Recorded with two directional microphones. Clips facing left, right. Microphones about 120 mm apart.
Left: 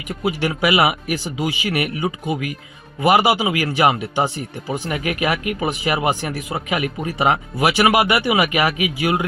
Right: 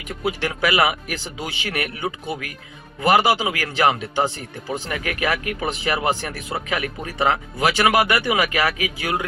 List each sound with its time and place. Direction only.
0.2 s speech: 10° left (ahead or behind)